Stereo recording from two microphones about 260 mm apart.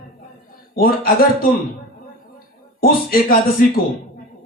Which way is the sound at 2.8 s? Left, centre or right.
Left.